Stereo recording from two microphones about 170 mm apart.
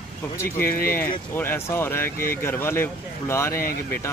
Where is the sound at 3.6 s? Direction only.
60° left (ahead or behind).